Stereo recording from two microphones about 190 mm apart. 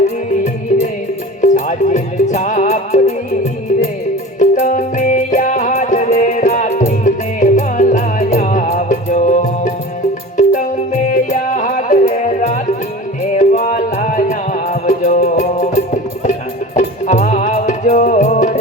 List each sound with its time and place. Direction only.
0.7 s music: 40° left (ahead or behind)